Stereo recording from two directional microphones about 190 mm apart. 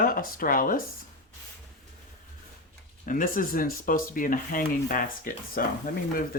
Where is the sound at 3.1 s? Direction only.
45° left (ahead or behind).